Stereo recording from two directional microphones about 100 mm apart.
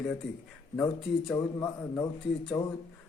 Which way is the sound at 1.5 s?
30° left (ahead or behind).